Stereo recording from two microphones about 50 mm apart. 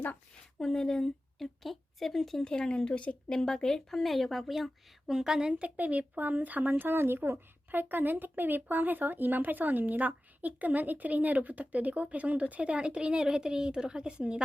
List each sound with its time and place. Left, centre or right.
0.6 s a woman's voice: centre
2.4 s a woman's voice: centre; by 5.7 s right
5.7 s speech: right